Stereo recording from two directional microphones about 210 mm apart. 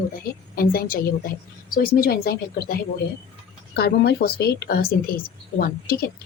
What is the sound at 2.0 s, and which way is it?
Speech, 45° left (ahead or behind).